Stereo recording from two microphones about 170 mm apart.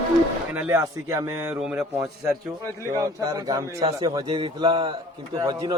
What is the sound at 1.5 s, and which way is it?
Speech, 5° right (ahead or behind).